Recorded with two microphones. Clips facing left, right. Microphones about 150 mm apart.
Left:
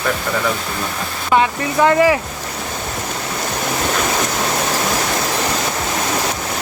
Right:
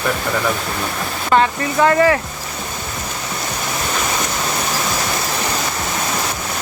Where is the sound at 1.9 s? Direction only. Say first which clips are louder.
Left 1 dB; 15° left (ahead or behind).